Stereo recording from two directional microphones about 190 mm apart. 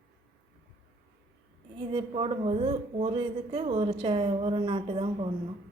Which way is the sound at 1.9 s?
25° right (ahead or behind).